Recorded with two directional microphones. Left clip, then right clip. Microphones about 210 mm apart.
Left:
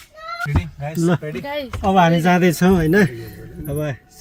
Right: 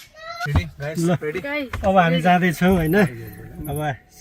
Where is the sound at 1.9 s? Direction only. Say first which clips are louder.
Left 1 dB; 15° left (ahead or behind).